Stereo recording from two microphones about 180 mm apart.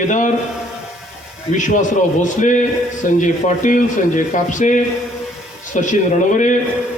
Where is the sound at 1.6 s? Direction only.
45° left (ahead or behind).